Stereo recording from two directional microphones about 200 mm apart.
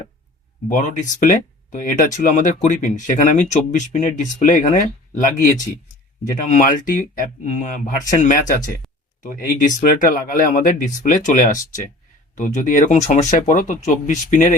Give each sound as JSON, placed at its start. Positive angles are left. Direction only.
{"t": 0.7, "sound": "speech", "side_deg": 40}